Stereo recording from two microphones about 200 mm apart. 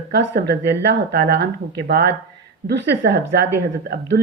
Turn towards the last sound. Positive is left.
turn(degrees=-55)  # may be behind; listen again after turning